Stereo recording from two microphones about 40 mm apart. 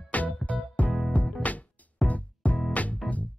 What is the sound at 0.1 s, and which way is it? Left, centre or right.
Music, left.